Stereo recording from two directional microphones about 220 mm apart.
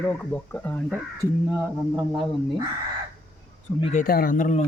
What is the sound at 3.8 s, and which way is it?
Speech, 35° left (ahead or behind).